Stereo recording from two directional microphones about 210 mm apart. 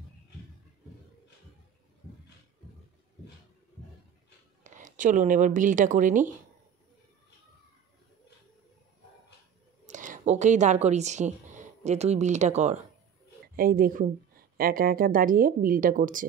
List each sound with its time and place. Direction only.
4.6 s speech: 40° right (ahead or behind)
9.8 s a woman's voice: 35° right (ahead or behind)
13.6 s a woman's voice: 45° right (ahead or behind)